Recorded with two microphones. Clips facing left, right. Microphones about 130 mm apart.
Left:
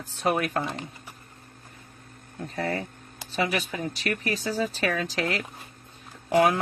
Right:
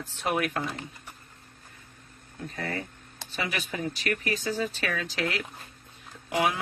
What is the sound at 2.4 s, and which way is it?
Speech, 40° left (ahead or behind).